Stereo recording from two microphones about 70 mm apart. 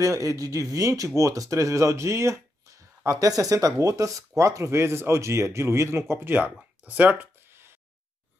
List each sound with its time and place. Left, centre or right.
0.0 s speech: right
3.1 s speech: right
7.2 s a sound: right